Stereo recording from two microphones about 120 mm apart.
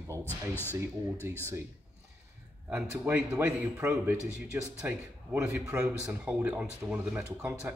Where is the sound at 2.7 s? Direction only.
15° right (ahead or behind).